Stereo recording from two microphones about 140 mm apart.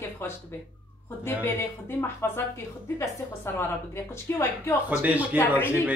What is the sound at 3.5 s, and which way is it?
A woman's voice, 15° left (ahead or behind).